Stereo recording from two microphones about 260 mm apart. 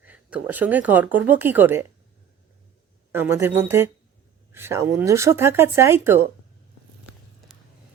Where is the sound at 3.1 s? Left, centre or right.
Centre.